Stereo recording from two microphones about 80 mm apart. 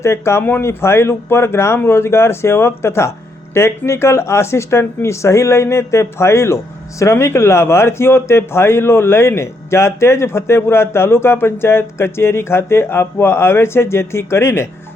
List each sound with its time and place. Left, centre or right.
0.0 s a man's voice: left